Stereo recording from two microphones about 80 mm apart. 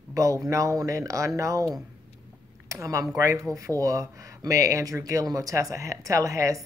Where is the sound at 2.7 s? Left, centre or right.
Right.